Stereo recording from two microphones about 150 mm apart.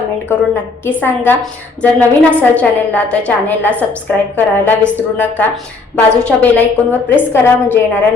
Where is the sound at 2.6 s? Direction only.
10° left (ahead or behind).